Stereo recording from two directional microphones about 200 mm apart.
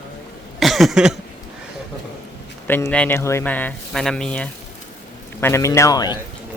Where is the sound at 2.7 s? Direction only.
5° left (ahead or behind).